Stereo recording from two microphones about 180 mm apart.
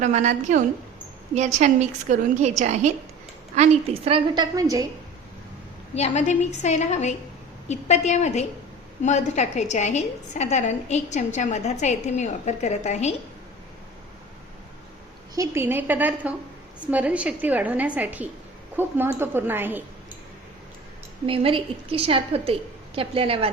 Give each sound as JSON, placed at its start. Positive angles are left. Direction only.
{"t": 0.0, "sound": "a woman's voice", "side_deg": -40}
{"t": 4.5, "sound": "a woman's voice", "side_deg": -20}
{"t": 5.9, "sound": "a woman's voice", "side_deg": 40}
{"t": 15.4, "sound": "a woman's voice", "side_deg": -15}
{"t": 21.2, "sound": "a woman's voice", "side_deg": -30}